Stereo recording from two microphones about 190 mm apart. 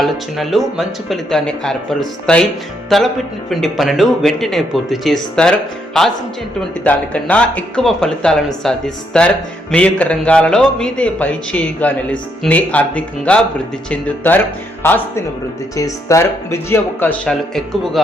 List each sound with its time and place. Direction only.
0.0 s a man's voice: centre (ahead or behind)